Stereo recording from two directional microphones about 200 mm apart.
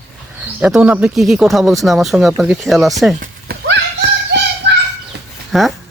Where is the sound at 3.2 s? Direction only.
50° right (ahead or behind).